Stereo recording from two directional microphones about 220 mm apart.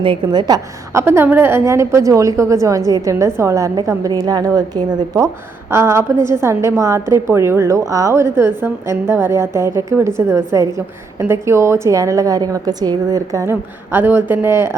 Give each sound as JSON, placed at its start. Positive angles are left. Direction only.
{"t": 0.0, "sound": "a woman's voice", "side_deg": -20}